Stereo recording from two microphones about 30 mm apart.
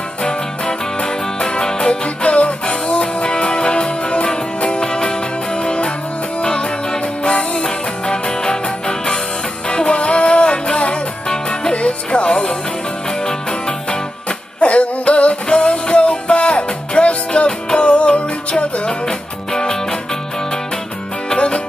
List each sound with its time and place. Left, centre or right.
0.2 s music: left
1.9 s music: left
9.7 s music: left
11.2 s music: left
11.7 s music: left
13.2 s music: left
14.6 s music: left
17.5 s music: left
17.8 s music: left
18.9 s music: left